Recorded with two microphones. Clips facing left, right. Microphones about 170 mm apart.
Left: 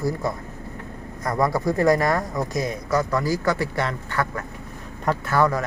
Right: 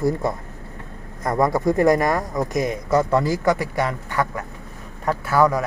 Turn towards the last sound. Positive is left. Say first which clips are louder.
# right 3 dB
turn(degrees=-10)  # may be behind; listen again after turning